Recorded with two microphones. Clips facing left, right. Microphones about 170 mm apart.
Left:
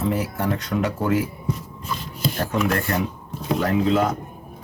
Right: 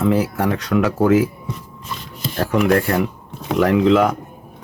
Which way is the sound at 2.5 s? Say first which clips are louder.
Right 9 dB; 65° right (ahead or behind).